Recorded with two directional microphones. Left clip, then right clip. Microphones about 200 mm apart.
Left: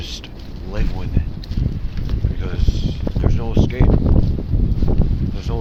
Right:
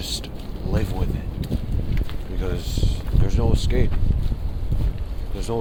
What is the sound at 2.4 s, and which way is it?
Speech, 20° right (ahead or behind).